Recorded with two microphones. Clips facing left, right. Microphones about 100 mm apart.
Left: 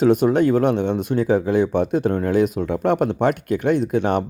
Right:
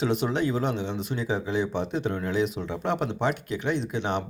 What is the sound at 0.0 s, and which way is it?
Speech, 45° left (ahead or behind).